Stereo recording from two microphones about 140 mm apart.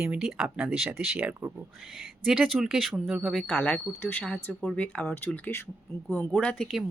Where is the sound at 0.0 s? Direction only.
5° right (ahead or behind).